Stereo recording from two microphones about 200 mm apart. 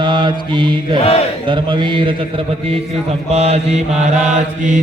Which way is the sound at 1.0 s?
30° left (ahead or behind).